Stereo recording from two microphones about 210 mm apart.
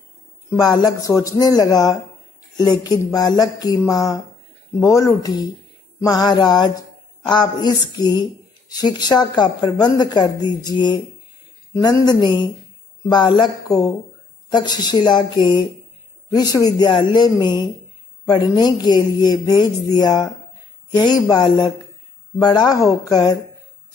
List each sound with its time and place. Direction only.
0.6 s speech: 20° left (ahead or behind)
18.2 s speech: 20° left (ahead or behind)